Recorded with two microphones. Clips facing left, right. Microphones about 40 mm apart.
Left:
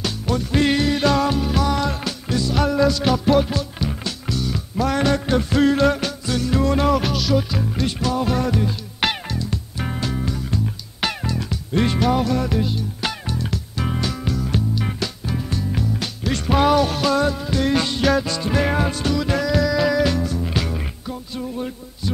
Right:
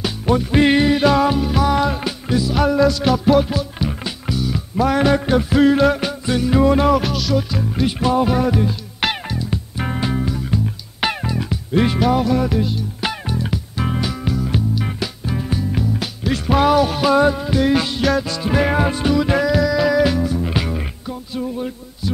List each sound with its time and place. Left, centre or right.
0.0 s music: centre
8.0 s music: centre
13.0 s music: centre
19.5 s music: centre